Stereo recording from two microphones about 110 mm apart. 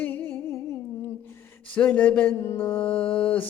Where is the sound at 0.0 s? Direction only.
20° left (ahead or behind).